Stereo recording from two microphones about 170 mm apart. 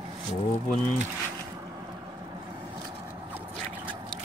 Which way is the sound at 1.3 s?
20° right (ahead or behind).